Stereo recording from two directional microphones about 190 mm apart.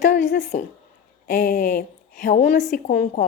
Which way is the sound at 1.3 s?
55° left (ahead or behind).